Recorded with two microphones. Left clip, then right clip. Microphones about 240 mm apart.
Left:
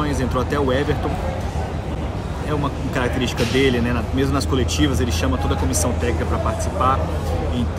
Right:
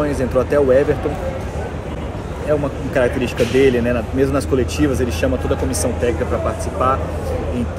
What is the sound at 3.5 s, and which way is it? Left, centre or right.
Speech, centre.